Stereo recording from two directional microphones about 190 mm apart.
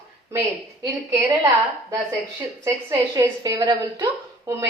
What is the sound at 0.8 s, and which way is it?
Speech, 15° right (ahead or behind).